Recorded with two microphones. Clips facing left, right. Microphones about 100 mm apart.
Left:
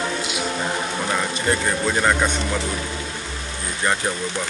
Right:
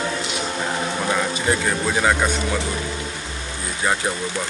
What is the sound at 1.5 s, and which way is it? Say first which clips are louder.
Speech: left 1 dB; 5° right (ahead or behind).